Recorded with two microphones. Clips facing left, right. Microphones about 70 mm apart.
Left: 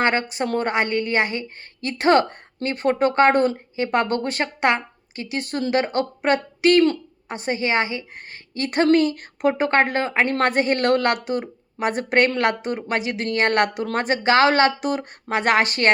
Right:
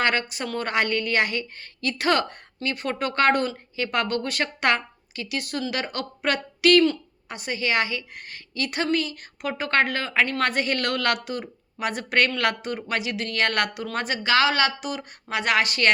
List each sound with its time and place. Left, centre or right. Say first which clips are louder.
0.0 s a woman's voice: left 3 dB; left